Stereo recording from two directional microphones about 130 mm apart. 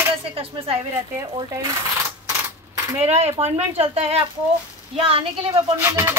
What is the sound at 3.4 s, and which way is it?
Speech, 15° right (ahead or behind).